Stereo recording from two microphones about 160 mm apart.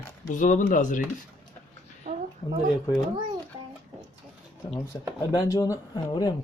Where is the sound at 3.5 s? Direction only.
25° right (ahead or behind).